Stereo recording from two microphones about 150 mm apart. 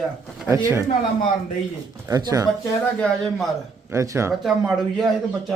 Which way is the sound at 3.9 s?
20° right (ahead or behind).